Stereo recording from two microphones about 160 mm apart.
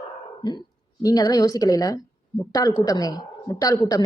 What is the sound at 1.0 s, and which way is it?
A woman's voice, 25° left (ahead or behind).